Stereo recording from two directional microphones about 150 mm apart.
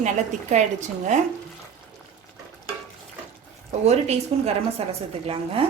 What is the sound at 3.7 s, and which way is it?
A woman's voice, 45° right (ahead or behind).